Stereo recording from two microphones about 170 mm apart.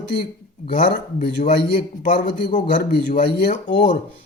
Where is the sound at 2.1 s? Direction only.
75° left (ahead or behind).